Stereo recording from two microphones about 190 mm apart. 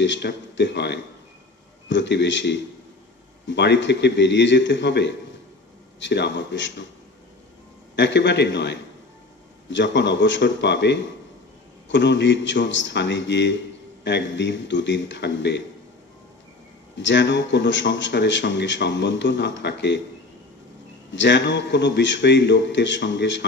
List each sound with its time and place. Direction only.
0.0 s a man's voice: 70° left (ahead or behind)
7.9 s a man's voice: 65° left (ahead or behind)
16.9 s a man's voice: 70° left (ahead or behind)
21.1 s a man's voice: 70° left (ahead or behind)